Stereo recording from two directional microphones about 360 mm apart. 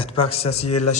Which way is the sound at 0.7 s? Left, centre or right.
Left.